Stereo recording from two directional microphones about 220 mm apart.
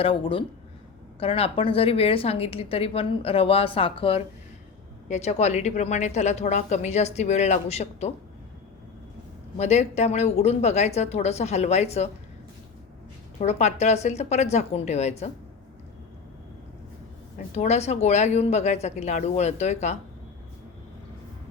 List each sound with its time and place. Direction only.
0.0 s a woman's voice: 25° left (ahead or behind)
9.6 s a woman's voice: 30° left (ahead or behind)
13.4 s a woman's voice: 30° left (ahead or behind)
17.3 s a woman's voice: 30° left (ahead or behind)